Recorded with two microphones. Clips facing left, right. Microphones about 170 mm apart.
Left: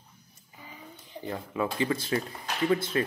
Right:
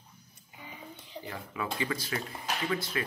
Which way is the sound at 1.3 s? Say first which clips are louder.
Left 6 dB; 25° left (ahead or behind).